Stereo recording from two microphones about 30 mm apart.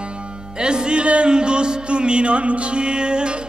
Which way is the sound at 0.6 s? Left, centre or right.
Right.